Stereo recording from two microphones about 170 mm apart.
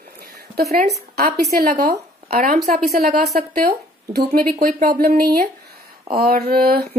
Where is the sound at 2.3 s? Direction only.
50° right (ahead or behind).